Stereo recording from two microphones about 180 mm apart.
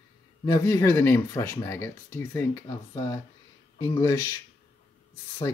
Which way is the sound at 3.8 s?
20° left (ahead or behind).